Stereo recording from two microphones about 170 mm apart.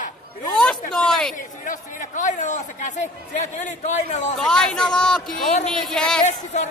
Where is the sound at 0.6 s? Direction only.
5° left (ahead or behind).